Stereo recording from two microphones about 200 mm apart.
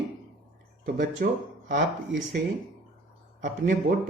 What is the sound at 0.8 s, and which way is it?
Speech, 40° right (ahead or behind).